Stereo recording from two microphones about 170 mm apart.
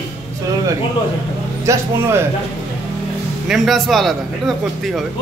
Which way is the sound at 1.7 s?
15° right (ahead or behind).